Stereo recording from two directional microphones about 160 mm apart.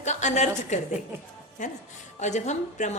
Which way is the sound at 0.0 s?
45° left (ahead or behind).